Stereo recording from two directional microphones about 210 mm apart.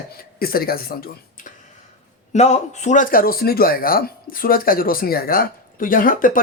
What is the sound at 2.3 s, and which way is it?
Speech, 35° left (ahead or behind).